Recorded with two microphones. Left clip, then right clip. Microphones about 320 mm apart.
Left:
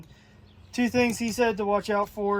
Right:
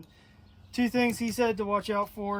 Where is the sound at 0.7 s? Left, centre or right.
Centre.